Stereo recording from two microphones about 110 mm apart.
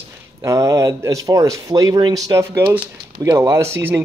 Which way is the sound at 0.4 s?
30° right (ahead or behind).